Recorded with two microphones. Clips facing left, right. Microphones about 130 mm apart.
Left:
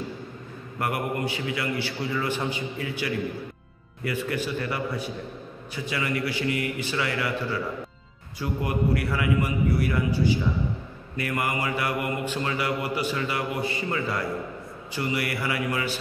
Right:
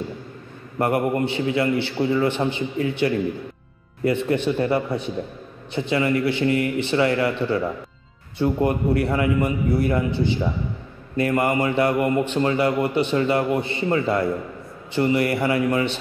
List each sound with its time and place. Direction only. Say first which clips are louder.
0.7 s a man's voice: right 7 dB; 30° right (ahead or behind)